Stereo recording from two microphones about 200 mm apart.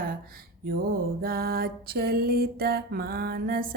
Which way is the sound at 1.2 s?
50° right (ahead or behind).